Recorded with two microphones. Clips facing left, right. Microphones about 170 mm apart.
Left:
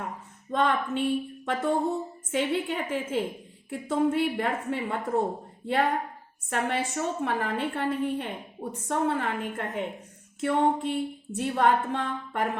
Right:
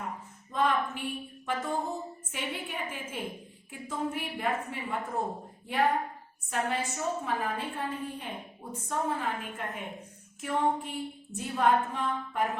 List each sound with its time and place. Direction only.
0.5 s speech: 75° left (ahead or behind)
2.3 s music: 70° left (ahead or behind)